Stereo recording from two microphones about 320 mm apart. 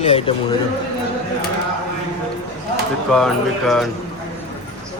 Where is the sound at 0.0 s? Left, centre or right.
Centre.